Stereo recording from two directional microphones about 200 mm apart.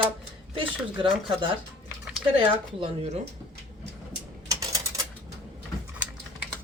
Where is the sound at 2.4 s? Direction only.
30° right (ahead or behind).